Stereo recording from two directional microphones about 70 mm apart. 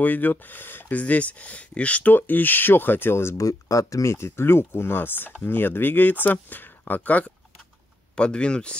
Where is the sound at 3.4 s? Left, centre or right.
Left.